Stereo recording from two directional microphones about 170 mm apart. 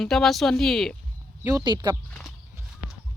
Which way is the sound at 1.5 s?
20° right (ahead or behind).